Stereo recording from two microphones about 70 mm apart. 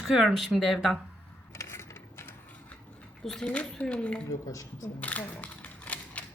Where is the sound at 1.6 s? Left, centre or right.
Left.